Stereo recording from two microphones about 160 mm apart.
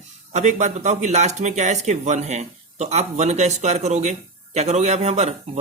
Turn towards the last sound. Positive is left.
turn(degrees=-45)  # may be behind; listen again after turning